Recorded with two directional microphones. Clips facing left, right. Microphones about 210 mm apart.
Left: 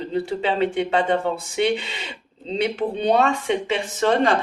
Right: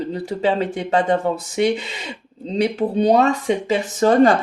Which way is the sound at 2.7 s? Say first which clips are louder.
Right 4 dB; 40° right (ahead or behind).